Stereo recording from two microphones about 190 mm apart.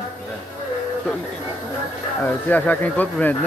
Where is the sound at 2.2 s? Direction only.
10° left (ahead or behind).